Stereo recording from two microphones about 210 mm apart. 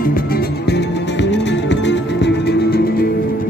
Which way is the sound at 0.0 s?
45° left (ahead or behind).